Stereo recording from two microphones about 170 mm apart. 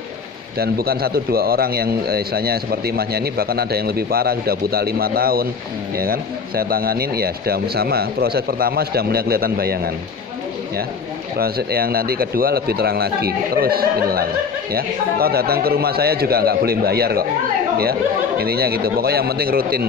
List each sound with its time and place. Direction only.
0.6 s speech: 65° right (ahead or behind)
11.3 s speech: 65° right (ahead or behind)
18.4 s speech: 65° right (ahead or behind)